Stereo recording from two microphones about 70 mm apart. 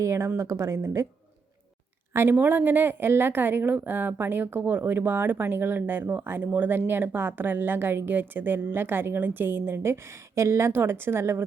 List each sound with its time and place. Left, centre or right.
0.0 s a woman's voice: right
2.4 s speech: right